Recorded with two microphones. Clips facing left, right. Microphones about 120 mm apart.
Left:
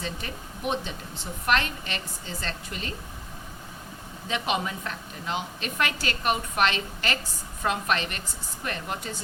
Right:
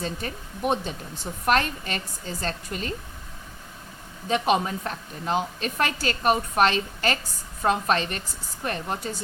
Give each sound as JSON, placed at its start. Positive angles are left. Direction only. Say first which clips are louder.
{"t": 0.0, "sound": "a woman's voice", "louder": "right 3 dB", "side_deg": -40}
{"t": 4.3, "sound": "a woman's voice", "louder": "right 6 dB", "side_deg": -40}